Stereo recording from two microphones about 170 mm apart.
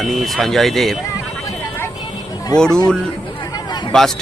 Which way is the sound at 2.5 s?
5° left (ahead or behind).